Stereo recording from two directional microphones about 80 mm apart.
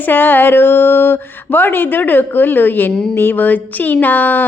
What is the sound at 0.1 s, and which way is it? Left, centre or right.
Speech, left.